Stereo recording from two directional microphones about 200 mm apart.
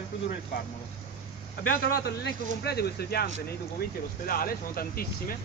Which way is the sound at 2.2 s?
55° left (ahead or behind).